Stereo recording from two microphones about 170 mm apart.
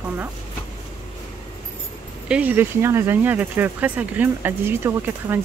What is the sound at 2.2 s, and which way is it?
Speech, 5° right (ahead or behind).